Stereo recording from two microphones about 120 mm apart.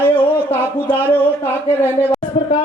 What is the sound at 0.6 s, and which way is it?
Speech, 15° right (ahead or behind).